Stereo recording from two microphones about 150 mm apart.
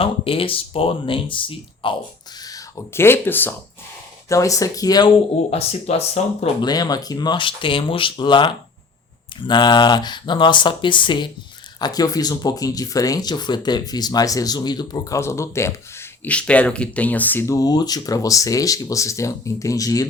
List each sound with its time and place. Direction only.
0.0 s speech: 35° left (ahead or behind)
2.4 s speech: 25° left (ahead or behind)
5.5 s speech: 45° left (ahead or behind)
6.6 s speech: 25° left (ahead or behind)